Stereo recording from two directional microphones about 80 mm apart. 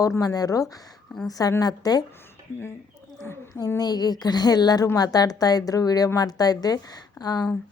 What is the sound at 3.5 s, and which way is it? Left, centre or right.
A woman's voice, left.